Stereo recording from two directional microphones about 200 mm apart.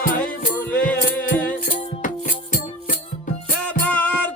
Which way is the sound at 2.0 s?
40° left (ahead or behind).